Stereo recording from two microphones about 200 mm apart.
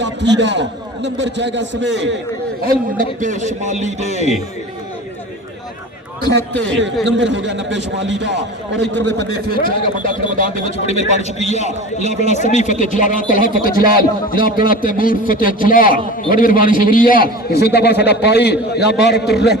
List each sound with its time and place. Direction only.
0.0 s a man's voice: 60° right (ahead or behind)
2.6 s a man's voice: 45° right (ahead or behind)
7.0 s a man's voice: 65° right (ahead or behind)
9.1 s a man's voice: 50° right (ahead or behind)
10.5 s a man's voice: 30° left (ahead or behind); by 19.5 s 55° left (ahead or behind)